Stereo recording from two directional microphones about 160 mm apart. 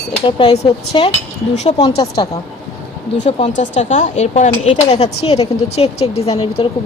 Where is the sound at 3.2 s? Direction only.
45° left (ahead or behind).